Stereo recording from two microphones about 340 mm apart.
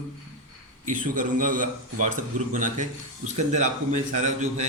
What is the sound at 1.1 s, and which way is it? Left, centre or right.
A man's voice, right.